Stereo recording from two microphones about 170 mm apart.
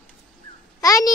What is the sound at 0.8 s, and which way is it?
Speech, 20° left (ahead or behind).